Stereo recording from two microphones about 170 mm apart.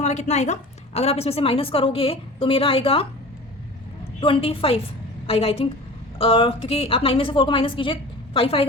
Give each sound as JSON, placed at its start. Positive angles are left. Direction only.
{"t": 0.0, "sound": "a woman's voice", "side_deg": 40}
{"t": 4.2, "sound": "a woman's voice", "side_deg": 30}